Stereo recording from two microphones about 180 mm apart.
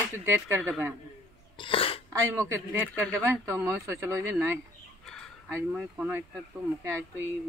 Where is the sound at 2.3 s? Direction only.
15° right (ahead or behind).